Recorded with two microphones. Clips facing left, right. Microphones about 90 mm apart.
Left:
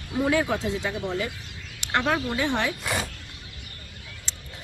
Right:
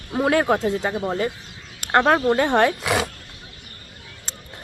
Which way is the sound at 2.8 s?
90° right.